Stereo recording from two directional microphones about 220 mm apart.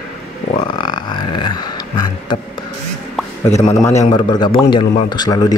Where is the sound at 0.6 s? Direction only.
20° left (ahead or behind).